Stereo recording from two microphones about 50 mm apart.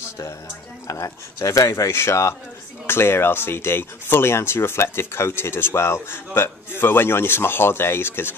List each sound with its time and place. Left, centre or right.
0.8 s speech: left
2.9 s speech: left